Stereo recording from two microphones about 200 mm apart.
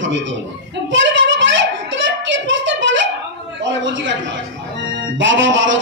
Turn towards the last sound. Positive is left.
turn(degrees=-65)  # may be behind; listen again after turning